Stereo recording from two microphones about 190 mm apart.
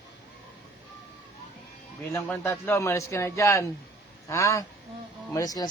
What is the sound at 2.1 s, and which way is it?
A man's voice, 10° left (ahead or behind).